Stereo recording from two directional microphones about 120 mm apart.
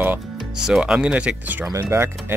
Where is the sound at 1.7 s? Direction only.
25° right (ahead or behind).